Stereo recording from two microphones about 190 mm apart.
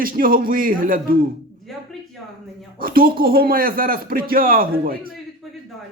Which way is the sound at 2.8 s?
50° right (ahead or behind).